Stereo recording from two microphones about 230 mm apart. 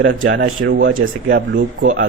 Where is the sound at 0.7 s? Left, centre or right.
Right.